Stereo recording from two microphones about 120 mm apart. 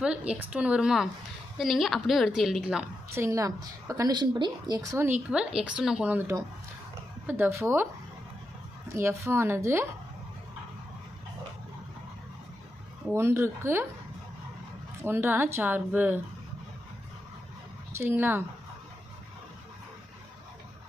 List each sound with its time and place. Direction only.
0.0 s a woman's voice: 10° right (ahead or behind)
3.2 s a woman's voice: 25° right (ahead or behind)
5.0 s a woman's voice: 10° right (ahead or behind)
9.0 s a woman's voice: 20° right (ahead or behind)
13.1 s a woman's voice: 20° right (ahead or behind)
15.0 s speech: 20° right (ahead or behind)
17.9 s a woman's voice: 20° right (ahead or behind)